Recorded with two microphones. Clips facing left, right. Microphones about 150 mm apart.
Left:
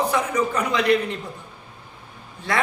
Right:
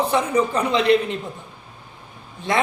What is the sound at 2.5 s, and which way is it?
Speech, 20° right (ahead or behind).